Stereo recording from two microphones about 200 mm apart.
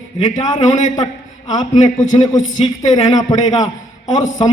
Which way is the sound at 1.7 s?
35° left (ahead or behind).